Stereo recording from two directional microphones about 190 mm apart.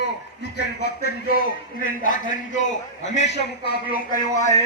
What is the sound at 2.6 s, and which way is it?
Speech, 40° left (ahead or behind).